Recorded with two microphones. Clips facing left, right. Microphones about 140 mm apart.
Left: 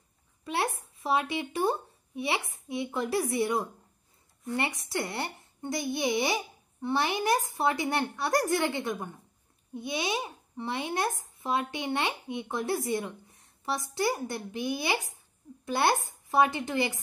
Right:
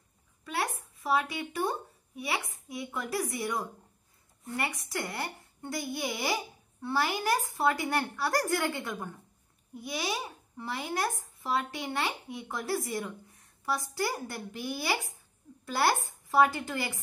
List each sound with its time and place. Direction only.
0.4 s a child's voice: 25° left (ahead or behind)